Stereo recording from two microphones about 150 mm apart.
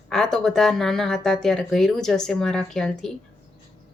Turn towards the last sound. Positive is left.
turn(degrees=5)  # may be behind; listen again after turning